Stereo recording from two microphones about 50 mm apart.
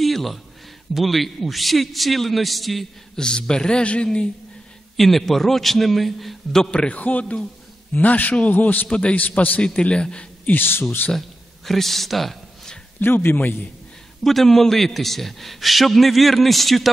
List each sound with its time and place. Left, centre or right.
0.0 s a sound: centre
0.9 s a man's voice: centre
3.2 s a man's voice: centre
4.9 s a man's voice: centre
6.6 s a man's voice: centre
7.0 s a man's voice: left
8.8 s a man's voice: left
9.6 s a man's voice: left
10.5 s speech: left
11.1 s a sound: centre
13.0 s speech: left
14.2 s a man's voice: centre